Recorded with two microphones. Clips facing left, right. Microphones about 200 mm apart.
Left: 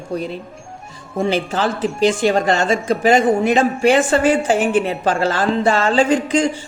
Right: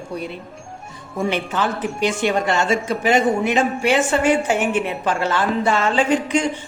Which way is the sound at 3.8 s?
35° left (ahead or behind).